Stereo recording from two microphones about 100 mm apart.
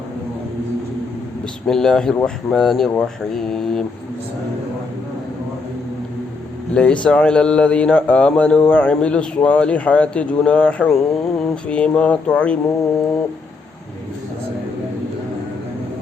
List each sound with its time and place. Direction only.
1.6 s speech: 5° left (ahead or behind)
6.7 s speech: 10° left (ahead or behind)